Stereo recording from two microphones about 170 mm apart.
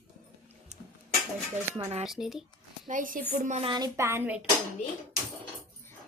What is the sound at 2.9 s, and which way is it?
Speech, 50° right (ahead or behind).